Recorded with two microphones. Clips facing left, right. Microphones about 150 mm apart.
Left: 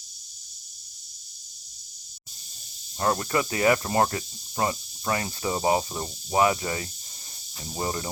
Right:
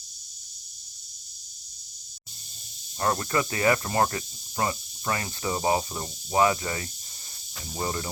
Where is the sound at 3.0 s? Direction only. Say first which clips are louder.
Left 1 dB; 15° left (ahead or behind).